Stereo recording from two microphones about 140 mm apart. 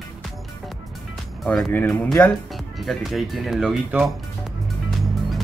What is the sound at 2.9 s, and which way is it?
Speech, centre (ahead or behind).